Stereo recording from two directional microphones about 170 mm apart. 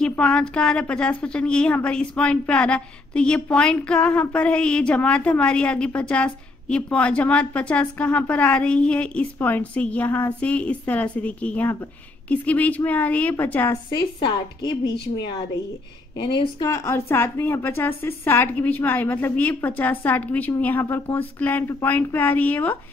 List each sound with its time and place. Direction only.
0.0 s a woman's voice: 5° left (ahead or behind)
13.8 s speech: 25° left (ahead or behind)
16.2 s a woman's voice: 25° left (ahead or behind); by 22.8 s 10° left (ahead or behind)